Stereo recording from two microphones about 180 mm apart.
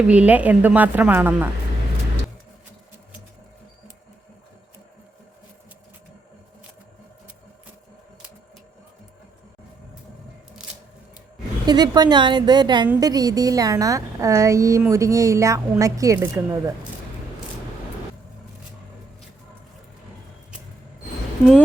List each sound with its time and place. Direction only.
0.1 s a woman's voice: 5° right (ahead or behind)
11.6 s a woman's voice: 25° right (ahead or behind)